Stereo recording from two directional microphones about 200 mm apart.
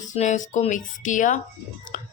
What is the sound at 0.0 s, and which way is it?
A woman's voice, 35° left (ahead or behind).